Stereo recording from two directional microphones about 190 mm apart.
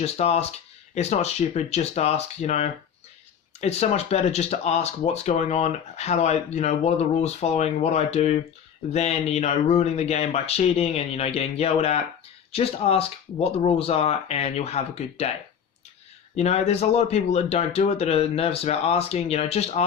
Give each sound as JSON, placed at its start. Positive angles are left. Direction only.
{"t": 0.0, "sound": "speech", "side_deg": 35}
{"t": 16.3, "sound": "speech", "side_deg": 35}